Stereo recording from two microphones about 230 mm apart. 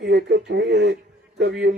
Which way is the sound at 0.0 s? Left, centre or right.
Right.